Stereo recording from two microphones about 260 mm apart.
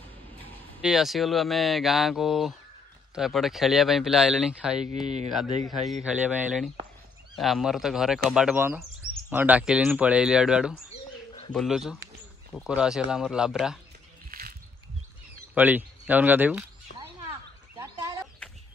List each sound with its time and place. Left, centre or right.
0.8 s speech: centre
5.0 s speech: right
5.3 s speech: centre
10.9 s bird: left
11.5 s speech: centre
14.3 s a sound: right
15.5 s speech: centre
17.3 s a sound: centre